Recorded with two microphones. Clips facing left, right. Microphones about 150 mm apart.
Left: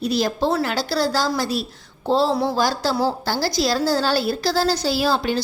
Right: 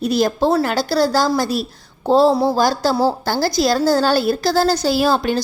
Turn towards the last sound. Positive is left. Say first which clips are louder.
# right 4 dB
turn(degrees=-50)  # may be behind; listen again after turning